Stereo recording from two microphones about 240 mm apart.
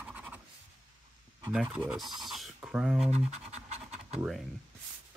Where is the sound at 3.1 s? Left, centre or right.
Right.